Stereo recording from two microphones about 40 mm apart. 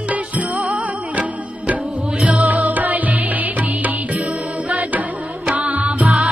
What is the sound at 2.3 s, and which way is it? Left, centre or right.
Music, right.